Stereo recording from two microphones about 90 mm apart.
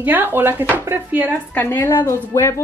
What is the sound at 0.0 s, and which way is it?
Speech, 20° right (ahead or behind).